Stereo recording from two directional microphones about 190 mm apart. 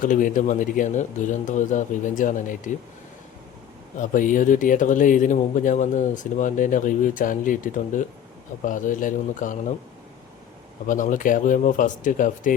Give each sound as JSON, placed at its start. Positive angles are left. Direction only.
{"t": 0.0, "sound": "speech", "side_deg": 45}
{"t": 3.9, "sound": "speech", "side_deg": 45}
{"t": 10.8, "sound": "speech", "side_deg": 45}